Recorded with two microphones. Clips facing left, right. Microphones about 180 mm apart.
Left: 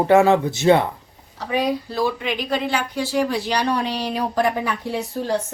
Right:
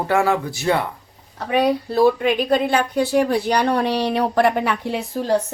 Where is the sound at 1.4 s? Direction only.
60° right (ahead or behind).